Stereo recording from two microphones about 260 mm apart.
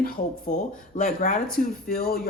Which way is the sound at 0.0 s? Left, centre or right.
Left.